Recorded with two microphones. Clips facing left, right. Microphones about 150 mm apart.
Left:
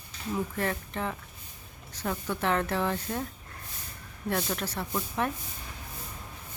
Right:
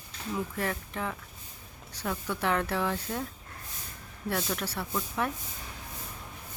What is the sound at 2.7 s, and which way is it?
Speech, 10° left (ahead or behind).